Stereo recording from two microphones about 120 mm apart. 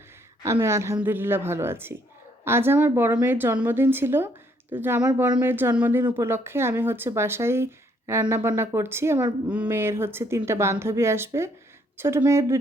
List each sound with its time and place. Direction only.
0.4 s speech: 20° right (ahead or behind)